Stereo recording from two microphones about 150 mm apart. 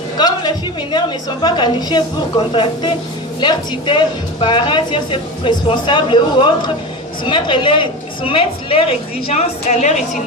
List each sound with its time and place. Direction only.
0.2 s a woman's voice: 30° left (ahead or behind)
9.2 s a woman's voice: 50° left (ahead or behind)